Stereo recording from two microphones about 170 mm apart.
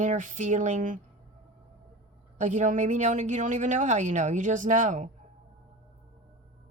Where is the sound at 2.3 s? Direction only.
45° right (ahead or behind).